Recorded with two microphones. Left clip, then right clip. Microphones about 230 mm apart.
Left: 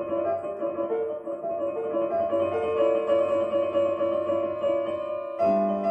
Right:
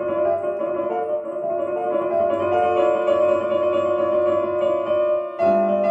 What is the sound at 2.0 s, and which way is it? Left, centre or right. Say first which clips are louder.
Music: right 3 dB; right.